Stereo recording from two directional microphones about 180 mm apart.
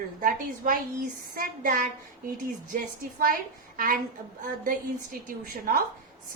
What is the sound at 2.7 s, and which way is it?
Speech, 50° right (ahead or behind).